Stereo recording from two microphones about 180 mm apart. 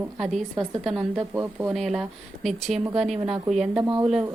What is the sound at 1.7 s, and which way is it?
Speech, centre (ahead or behind).